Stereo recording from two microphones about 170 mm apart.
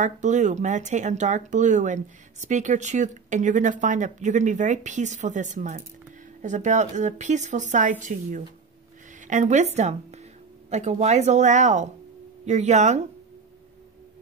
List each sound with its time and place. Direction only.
0.0 s speech: 45° right (ahead or behind)